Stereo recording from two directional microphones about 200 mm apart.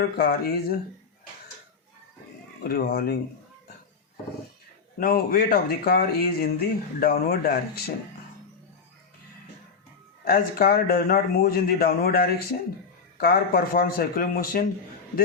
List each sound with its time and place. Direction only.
0.0 s speech: 50° left (ahead or behind)
2.6 s speech: 50° left (ahead or behind)
4.9 s speech: 45° left (ahead or behind)
10.2 s speech: 50° left (ahead or behind)